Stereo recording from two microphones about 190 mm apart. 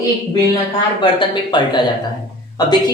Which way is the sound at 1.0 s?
25° left (ahead or behind).